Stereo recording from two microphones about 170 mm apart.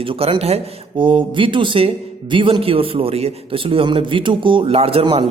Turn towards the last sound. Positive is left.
turn(degrees=-35)  # may be behind; listen again after turning